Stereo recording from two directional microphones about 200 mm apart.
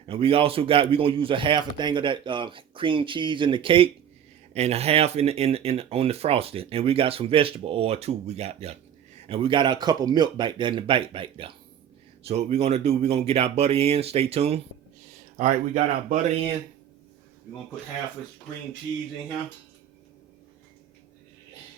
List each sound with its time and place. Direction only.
0.0 s speech: 25° right (ahead or behind)